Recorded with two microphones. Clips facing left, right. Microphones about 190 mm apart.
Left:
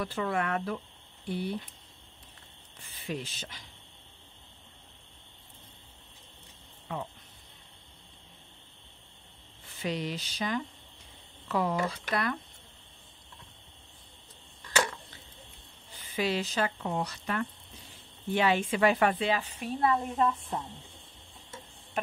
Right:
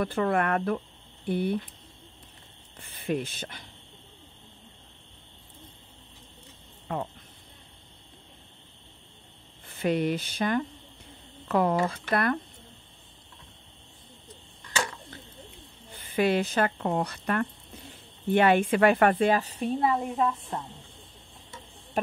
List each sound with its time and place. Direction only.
0.0 s speech: 55° right (ahead or behind)
2.8 s speech: 55° right (ahead or behind)
6.9 s speech: 50° right (ahead or behind)
9.7 s speech: 55° right (ahead or behind)
15.9 s speech: 55° right (ahead or behind); by 19.7 s 35° right (ahead or behind)
19.8 s a woman's voice: 5° right (ahead or behind)